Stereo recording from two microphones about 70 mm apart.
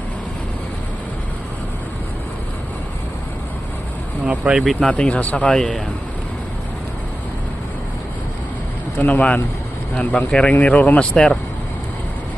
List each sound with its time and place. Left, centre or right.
4.3 s speech: centre
4.7 s speech: centre
9.0 s speech: centre